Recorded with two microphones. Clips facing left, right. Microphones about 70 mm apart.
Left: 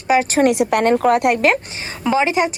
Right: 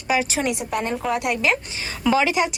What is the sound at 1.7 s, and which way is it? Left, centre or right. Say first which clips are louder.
Speech: left 2 dB; left.